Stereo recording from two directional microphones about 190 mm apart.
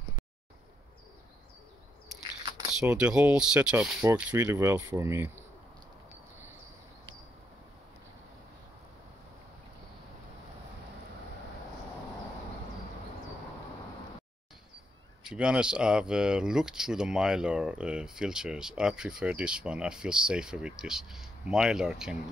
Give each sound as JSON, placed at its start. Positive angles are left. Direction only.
{"t": 2.4, "sound": "keys jangling", "side_deg": -20}
{"t": 2.8, "sound": "speech", "side_deg": -5}
{"t": 15.2, "sound": "speech", "side_deg": -5}